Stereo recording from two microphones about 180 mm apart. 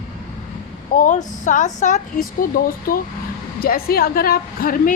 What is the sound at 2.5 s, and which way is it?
A woman's voice, 55° left (ahead or behind).